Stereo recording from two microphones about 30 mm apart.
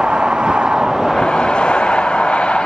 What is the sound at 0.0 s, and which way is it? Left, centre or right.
Vehicle, right.